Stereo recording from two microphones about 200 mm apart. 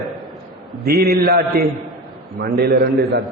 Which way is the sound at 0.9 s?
55° right (ahead or behind).